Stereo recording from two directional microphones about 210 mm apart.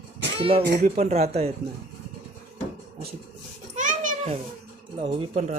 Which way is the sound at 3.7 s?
35° right (ahead or behind).